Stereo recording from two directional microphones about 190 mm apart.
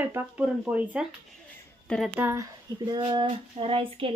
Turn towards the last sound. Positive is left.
turn(degrees=-30)  # may be behind; listen again after turning